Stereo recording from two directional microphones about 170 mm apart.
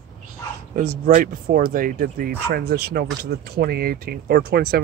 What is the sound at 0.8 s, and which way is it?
Speech, 55° right (ahead or behind).